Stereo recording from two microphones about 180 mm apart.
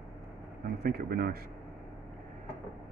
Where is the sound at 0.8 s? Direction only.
55° right (ahead or behind).